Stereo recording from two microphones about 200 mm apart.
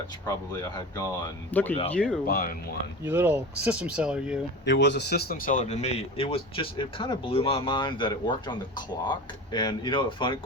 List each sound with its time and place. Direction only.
0.3 s speech: 20° left (ahead or behind)
1.5 s speech: 10° left (ahead or behind)
2.2 s speech: 45° left (ahead or behind)
3.0 s speech: 10° right (ahead or behind)
4.6 s speech: 60° left (ahead or behind); by 10.3 s 25° left (ahead or behind)